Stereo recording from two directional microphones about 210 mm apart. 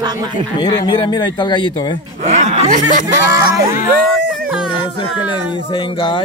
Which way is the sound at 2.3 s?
30° right (ahead or behind).